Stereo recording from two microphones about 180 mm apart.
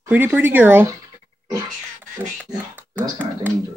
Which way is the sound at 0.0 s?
10° right (ahead or behind).